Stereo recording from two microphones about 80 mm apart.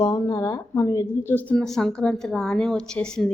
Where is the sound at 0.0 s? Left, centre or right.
Left.